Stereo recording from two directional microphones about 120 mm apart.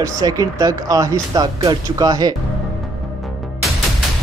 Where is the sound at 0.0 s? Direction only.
30° right (ahead or behind).